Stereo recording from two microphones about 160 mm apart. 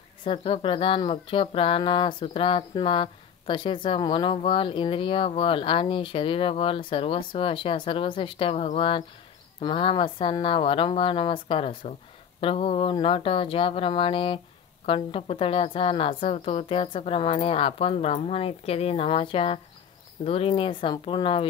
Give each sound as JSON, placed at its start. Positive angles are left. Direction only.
{"t": 0.2, "sound": "speech", "side_deg": 35}